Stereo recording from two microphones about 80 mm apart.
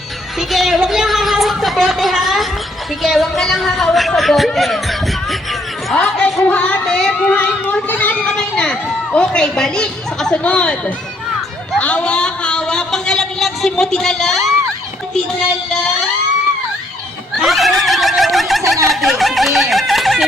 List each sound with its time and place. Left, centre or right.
0.3 s a sound: centre
3.0 s speech: centre
6.0 s speech: centre
6.8 s speech: centre
7.3 s speech: centre
8.3 s speech: centre
17.3 s neigh: centre
18.9 s snicker: centre